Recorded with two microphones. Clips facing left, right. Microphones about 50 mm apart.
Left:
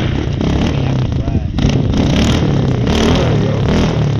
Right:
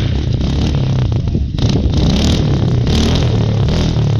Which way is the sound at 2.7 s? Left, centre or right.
Left.